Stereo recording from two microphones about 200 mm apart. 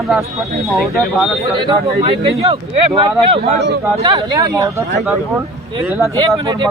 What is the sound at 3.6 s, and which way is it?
Speech, 50° right (ahead or behind).